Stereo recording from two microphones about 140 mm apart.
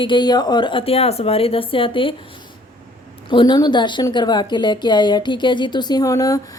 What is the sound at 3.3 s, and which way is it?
A woman's voice, 30° left (ahead or behind).